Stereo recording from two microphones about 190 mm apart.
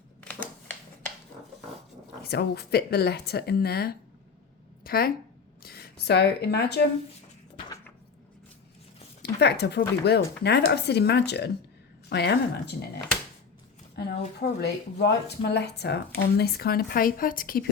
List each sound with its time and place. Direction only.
0.2 s a sound: 10° left (ahead or behind)
2.2 s speech: 60° left (ahead or behind)
9.2 s a woman's voice: 60° left (ahead or behind)
14.3 s speech: 60° left (ahead or behind)